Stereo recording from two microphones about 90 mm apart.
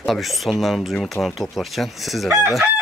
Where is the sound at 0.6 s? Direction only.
Centre (ahead or behind).